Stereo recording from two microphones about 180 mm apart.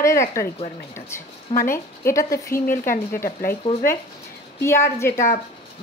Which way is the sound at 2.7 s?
50° left (ahead or behind).